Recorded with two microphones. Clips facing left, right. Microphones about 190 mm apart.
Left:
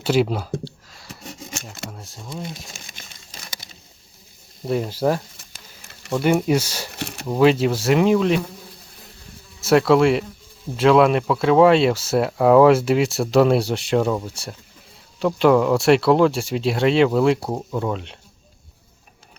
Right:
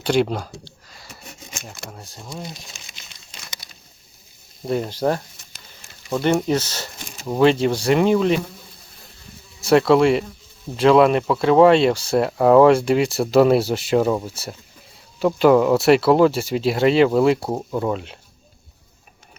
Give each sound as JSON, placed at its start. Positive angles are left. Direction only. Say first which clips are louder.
{"t": 0.0, "sound": "speech", "louder": "even", "side_deg": 5}
{"t": 0.9, "sound": "a sound", "louder": "left 2 dB", "side_deg": 0}
{"t": 1.6, "sound": "speech", "louder": "left 1 dB", "side_deg": 0}
{"t": 2.7, "sound": "crumpling", "louder": "left 3 dB", "side_deg": 50}
{"t": 4.6, "sound": "speech", "louder": "even", "side_deg": 0}
{"t": 6.9, "sound": "a sound", "louder": "left 8 dB", "side_deg": 65}
{"t": 7.3, "sound": "speech", "louder": "even", "side_deg": 5}
{"t": 9.6, "sound": "speech", "louder": "right 1 dB", "side_deg": 0}